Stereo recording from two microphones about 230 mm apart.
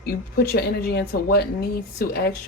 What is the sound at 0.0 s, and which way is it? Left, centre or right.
Speech, left.